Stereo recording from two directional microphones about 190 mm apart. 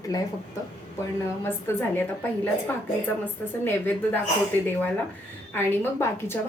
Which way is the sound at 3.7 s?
10° left (ahead or behind).